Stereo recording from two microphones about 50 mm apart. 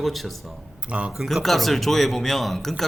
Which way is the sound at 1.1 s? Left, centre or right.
Centre.